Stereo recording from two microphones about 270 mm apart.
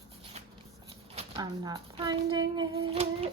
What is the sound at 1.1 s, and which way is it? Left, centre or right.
Speech, centre.